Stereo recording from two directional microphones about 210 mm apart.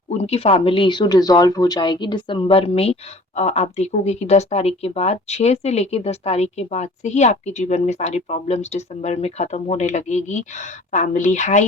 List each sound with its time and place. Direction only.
0.1 s speech: 30° left (ahead or behind)